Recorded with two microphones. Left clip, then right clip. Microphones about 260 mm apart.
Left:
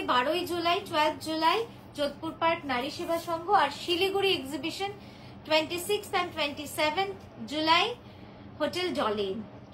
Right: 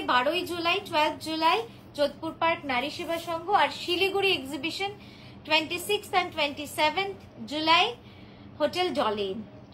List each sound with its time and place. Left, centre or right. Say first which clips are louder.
0.0 s a woman's voice: right 2 dB; right